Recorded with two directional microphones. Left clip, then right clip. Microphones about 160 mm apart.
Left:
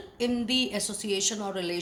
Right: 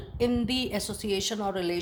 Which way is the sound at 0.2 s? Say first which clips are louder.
Even; 45° right (ahead or behind).